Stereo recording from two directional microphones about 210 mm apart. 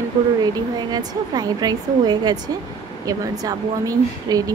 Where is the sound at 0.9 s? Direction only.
20° right (ahead or behind).